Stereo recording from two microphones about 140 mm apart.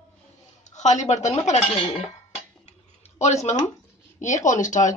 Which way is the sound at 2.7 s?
55° left (ahead or behind).